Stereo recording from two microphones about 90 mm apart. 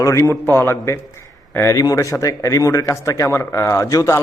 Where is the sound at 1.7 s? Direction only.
40° left (ahead or behind).